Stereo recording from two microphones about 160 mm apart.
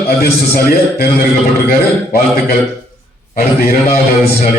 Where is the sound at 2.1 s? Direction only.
75° left (ahead or behind).